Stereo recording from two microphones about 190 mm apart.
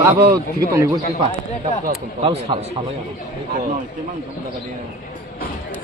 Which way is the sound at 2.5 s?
25° right (ahead or behind).